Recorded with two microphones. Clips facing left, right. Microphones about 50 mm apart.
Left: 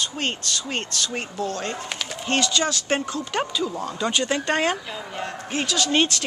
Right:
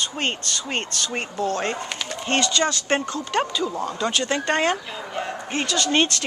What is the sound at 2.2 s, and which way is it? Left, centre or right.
Speech, centre.